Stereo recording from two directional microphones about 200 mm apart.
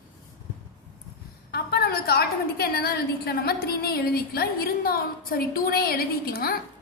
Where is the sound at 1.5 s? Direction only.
50° left (ahead or behind).